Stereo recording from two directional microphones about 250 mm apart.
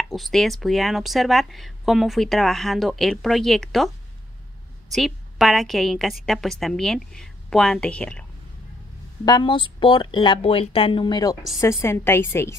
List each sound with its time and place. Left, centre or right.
0.1 s speech: centre
4.9 s speech: centre
9.2 s a woman's voice: centre